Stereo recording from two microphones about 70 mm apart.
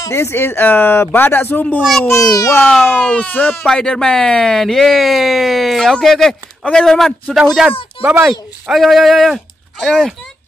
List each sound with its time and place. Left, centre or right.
0.0 s speech: left
2.2 s a child's voice: left
2.8 s speech: left; by 7.4 s centre
8.0 s speech: right
8.3 s speech: centre